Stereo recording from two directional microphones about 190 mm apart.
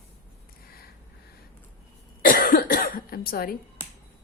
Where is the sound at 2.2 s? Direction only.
50° left (ahead or behind).